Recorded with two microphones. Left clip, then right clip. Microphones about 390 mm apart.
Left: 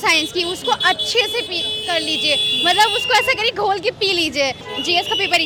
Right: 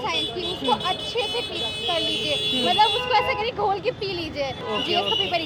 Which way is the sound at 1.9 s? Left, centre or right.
Left.